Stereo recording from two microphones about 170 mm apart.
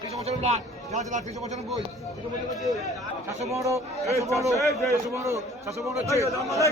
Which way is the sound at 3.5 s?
15° right (ahead or behind).